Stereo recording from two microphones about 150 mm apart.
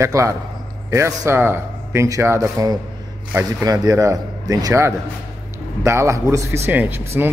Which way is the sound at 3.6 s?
25° right (ahead or behind).